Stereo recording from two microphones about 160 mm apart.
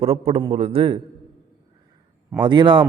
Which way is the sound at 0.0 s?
35° right (ahead or behind).